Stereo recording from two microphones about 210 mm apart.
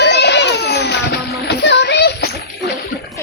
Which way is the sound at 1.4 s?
55° left (ahead or behind).